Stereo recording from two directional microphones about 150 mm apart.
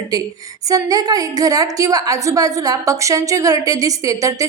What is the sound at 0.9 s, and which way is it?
A woman's voice, 25° right (ahead or behind).